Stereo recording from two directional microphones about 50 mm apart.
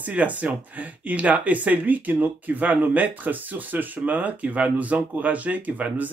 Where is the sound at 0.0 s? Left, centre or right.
Right.